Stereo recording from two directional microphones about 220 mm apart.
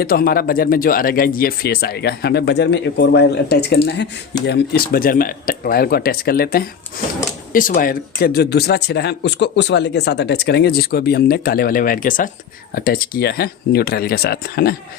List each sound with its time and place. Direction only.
0.0 s speech: 40° left (ahead or behind)